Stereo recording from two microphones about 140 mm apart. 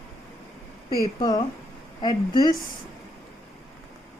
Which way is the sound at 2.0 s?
30° left (ahead or behind).